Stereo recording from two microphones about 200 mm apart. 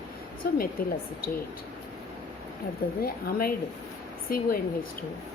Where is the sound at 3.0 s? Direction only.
50° left (ahead or behind).